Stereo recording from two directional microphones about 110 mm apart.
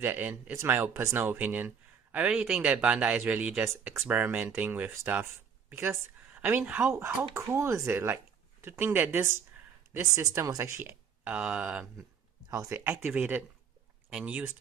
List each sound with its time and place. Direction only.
0.0 s speech: 15° right (ahead or behind)
6.9 s speech: 20° right (ahead or behind)
12.4 s speech: 25° right (ahead or behind)